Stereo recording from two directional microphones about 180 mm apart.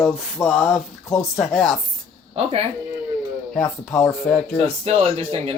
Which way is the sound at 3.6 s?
20° left (ahead or behind).